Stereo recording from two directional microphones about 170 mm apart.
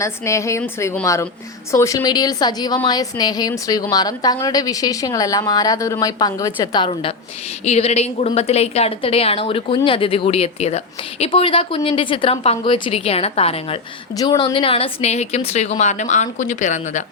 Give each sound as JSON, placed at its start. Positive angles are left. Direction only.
{"t": 0.0, "sound": "a woman's voice", "side_deg": 15}